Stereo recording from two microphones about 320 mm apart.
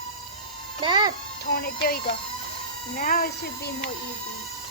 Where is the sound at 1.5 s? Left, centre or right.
Left.